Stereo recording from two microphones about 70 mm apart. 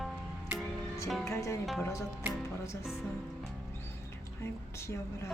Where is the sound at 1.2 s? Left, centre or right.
Left.